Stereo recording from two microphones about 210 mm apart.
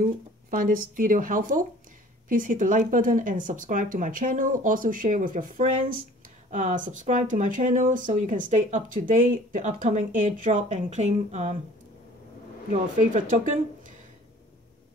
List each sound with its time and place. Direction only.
0.0 s speech: 40° right (ahead or behind)
13.1 s speech: 40° right (ahead or behind)